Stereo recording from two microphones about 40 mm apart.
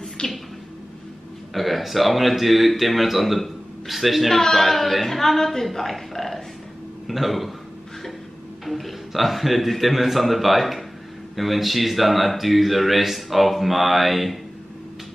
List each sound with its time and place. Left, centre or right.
0.2 s a sound: left
1.5 s speech: centre
4.3 s a woman's voice: centre
8.6 s a man's voice: centre